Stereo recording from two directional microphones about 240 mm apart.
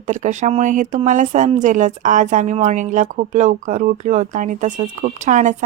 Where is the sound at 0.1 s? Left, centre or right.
Right.